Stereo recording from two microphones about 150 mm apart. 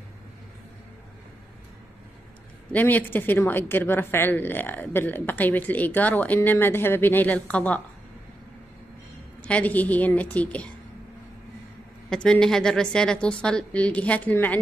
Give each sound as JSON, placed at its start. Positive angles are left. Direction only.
{"t": 2.7, "sound": "a woman's voice", "side_deg": 10}
{"t": 9.4, "sound": "a woman's voice", "side_deg": 10}
{"t": 12.1, "sound": "a woman's voice", "side_deg": 5}